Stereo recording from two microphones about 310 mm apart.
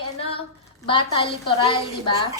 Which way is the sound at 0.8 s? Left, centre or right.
Centre.